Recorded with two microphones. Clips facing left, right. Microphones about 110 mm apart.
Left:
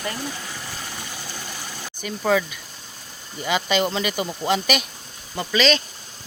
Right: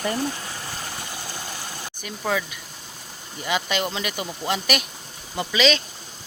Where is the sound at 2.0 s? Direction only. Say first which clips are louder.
Left 5 dB; centre (ahead or behind).